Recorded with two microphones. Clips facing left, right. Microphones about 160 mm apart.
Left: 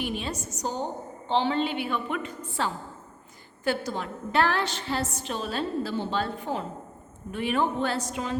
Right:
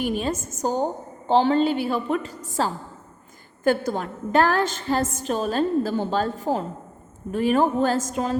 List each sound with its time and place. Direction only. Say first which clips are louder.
0.0 s a woman's voice: right 6 dB; 45° right (ahead or behind)